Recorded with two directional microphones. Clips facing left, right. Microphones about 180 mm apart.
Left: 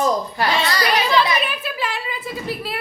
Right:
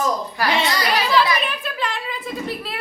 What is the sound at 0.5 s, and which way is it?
Speech, 20° right (ahead or behind).